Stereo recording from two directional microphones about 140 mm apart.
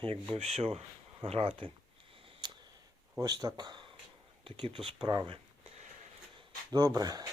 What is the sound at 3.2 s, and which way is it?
Speech, 30° right (ahead or behind).